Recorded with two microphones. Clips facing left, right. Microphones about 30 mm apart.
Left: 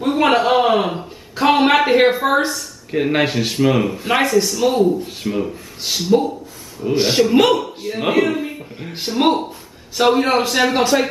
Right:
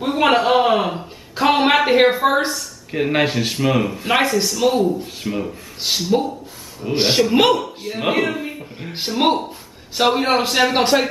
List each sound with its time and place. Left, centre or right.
0.0 s a sound: centre
1.4 s speech: centre
6.9 s a man's voice: right
7.5 s a man's voice: centre
10.7 s a man's voice: right